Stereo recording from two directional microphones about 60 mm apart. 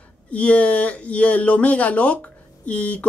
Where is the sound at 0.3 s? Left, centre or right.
Left.